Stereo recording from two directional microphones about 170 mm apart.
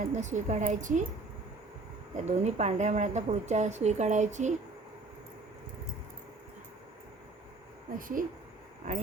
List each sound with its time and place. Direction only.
0.0 s a woman's voice: 45° right (ahead or behind)
2.1 s a woman's voice: 40° right (ahead or behind)
7.9 s a woman's voice: 55° right (ahead or behind)